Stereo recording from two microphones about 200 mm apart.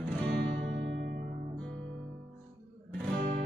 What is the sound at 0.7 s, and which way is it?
Music, 55° right (ahead or behind).